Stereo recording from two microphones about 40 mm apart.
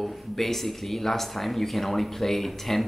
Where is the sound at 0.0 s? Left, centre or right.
Centre.